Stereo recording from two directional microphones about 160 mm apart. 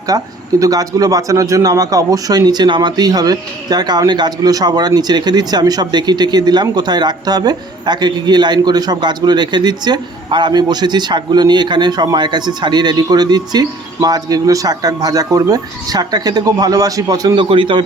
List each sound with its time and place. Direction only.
0.1 s a man's voice: 20° right (ahead or behind)